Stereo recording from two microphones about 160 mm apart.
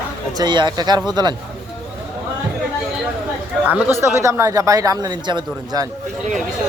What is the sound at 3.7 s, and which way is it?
Speech, 15° right (ahead or behind).